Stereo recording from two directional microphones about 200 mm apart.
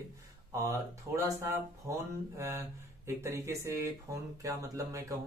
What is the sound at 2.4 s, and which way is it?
Speech, 15° right (ahead or behind).